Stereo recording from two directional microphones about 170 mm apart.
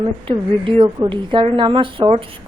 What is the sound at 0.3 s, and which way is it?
A woman's voice, 30° right (ahead or behind).